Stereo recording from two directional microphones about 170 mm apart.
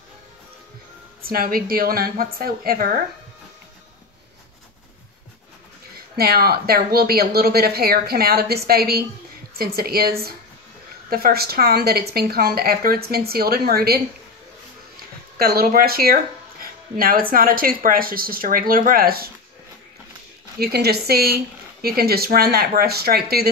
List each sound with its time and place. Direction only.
1.2 s speech: 60° right (ahead or behind)
6.1 s speech: 65° right (ahead or behind)
15.3 s speech: 65° right (ahead or behind)
20.5 s speech: 65° right (ahead or behind)